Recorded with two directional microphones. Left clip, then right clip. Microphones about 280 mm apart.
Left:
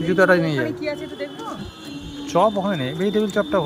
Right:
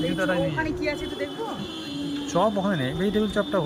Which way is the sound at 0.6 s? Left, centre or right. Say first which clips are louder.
Left 2 dB; centre.